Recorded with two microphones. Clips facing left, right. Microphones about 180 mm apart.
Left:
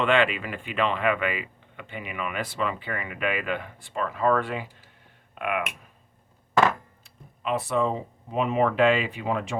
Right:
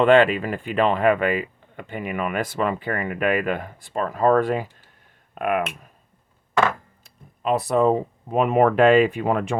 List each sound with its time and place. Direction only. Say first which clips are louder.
0.0 s speech: right 7 dB; 40° right (ahead or behind)
7.0 s speech: right 8 dB; 40° right (ahead or behind)